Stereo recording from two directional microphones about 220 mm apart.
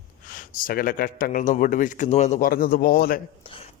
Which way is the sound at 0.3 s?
40° left (ahead or behind).